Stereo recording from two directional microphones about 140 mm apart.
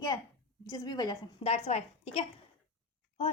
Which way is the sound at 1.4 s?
50° left (ahead or behind).